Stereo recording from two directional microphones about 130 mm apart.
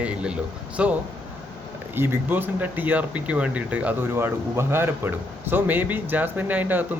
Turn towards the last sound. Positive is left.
turn(degrees=-15)  # may be behind; listen again after turning